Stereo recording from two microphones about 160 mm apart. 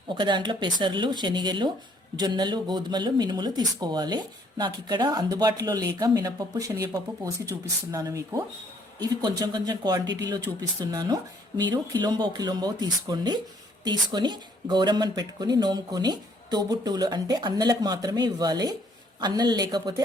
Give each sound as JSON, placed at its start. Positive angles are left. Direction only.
{"t": 0.1, "sound": "speech", "side_deg": -30}